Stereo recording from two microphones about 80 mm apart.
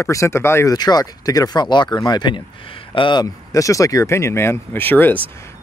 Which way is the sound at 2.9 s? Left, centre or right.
Left.